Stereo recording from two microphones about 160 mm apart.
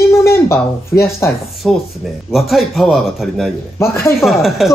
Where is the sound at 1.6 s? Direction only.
Centre (ahead or behind).